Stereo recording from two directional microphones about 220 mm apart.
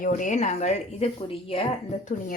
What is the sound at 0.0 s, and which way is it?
Speech, 35° left (ahead or behind).